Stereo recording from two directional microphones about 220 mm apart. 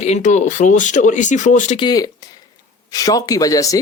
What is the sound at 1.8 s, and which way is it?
Speech, 20° left (ahead or behind).